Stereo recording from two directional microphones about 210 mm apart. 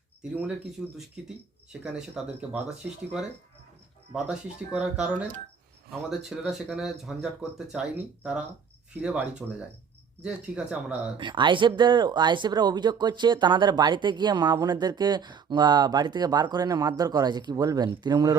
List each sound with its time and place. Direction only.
0.2 s speech: 5° right (ahead or behind)
11.2 s speech: 20° right (ahead or behind)